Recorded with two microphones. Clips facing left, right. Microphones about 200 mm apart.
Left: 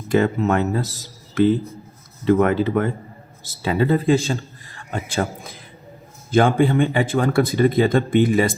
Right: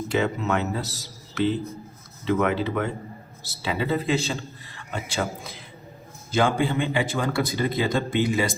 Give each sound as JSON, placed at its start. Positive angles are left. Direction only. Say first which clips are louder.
{"t": 0.1, "sound": "a man's voice", "louder": "left 7 dB", "side_deg": 50}